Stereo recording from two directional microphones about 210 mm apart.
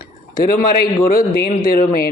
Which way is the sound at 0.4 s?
45° left (ahead or behind).